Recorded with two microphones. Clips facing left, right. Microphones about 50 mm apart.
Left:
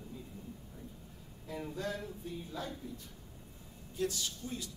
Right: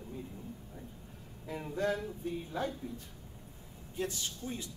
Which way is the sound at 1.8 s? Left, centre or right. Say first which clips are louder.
Right 10 dB; right.